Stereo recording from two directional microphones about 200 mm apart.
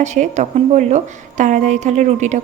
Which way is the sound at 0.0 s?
35° right (ahead or behind).